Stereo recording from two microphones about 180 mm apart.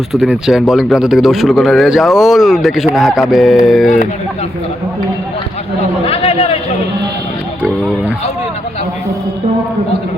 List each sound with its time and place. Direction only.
0.1 s a man's voice: centre (ahead or behind)
6.1 s a man's voice: 30° left (ahead or behind)